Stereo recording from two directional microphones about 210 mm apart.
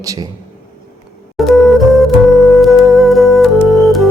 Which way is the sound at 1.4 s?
Centre (ahead or behind).